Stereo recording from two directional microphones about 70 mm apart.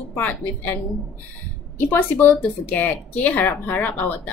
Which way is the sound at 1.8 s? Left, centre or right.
Left.